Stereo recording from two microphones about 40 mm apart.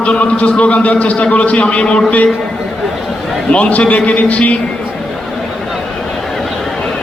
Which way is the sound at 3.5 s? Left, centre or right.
Left.